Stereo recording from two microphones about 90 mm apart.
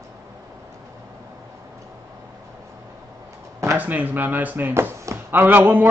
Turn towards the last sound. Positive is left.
turn(degrees=-20)  # may be behind; listen again after turning